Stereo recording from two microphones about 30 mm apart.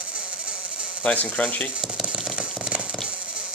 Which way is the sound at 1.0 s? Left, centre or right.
Left.